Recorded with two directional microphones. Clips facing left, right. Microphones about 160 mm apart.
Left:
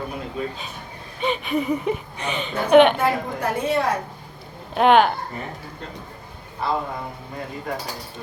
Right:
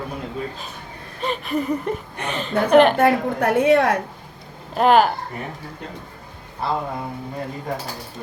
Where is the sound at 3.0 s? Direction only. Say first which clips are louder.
Right 5 dB; 60° right (ahead or behind).